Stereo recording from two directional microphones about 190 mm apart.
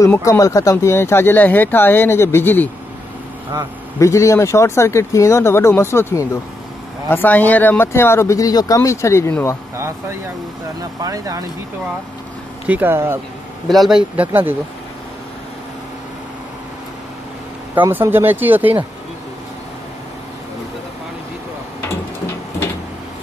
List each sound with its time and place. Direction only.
0.0 s speech: 15° left (ahead or behind)
4.0 s speech: 15° left (ahead or behind)
9.8 s speech: 15° right (ahead or behind)
12.6 s speech: 10° right (ahead or behind)
13.7 s speech: centre (ahead or behind)
17.7 s speech: 15° right (ahead or behind)
21.8 s printer: 15° left (ahead or behind)